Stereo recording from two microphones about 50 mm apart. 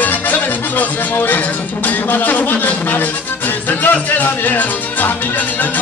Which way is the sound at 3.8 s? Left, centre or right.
Left.